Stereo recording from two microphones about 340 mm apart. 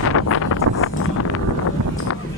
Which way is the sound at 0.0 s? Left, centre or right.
Left.